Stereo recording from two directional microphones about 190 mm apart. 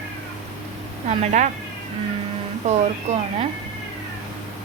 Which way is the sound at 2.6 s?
35° right (ahead or behind).